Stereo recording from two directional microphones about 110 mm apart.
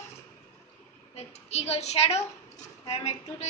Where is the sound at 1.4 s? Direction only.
80° left.